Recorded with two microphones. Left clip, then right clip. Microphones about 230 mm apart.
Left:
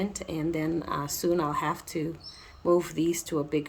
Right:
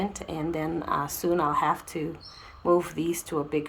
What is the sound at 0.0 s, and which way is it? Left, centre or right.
Speech, left.